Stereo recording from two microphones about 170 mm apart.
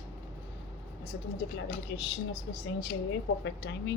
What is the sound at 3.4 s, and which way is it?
Speech, 90° left.